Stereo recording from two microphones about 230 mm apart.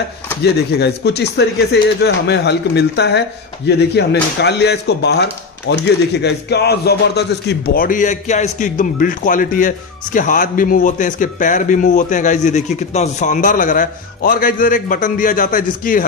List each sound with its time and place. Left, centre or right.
0.4 s speech: left